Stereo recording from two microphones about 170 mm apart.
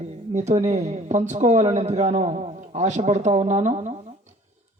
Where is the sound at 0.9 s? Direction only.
45° right (ahead or behind).